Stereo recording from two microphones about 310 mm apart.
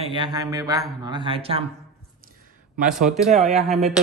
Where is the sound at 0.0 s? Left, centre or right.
Centre.